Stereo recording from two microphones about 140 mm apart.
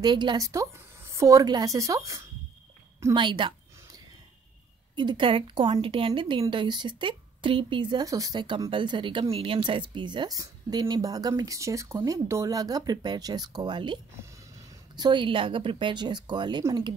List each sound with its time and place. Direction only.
0.0 s a woman's voice: 35° right (ahead or behind)
3.2 s a sound: 35° right (ahead or behind)
4.9 s speech: 35° right (ahead or behind)
15.0 s speech: 35° right (ahead or behind)